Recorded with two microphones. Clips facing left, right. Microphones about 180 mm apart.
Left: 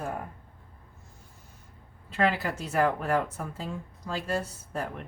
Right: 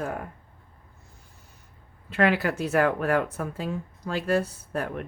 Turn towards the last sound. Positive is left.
turn(degrees=-60)  # may be behind; listen again after turning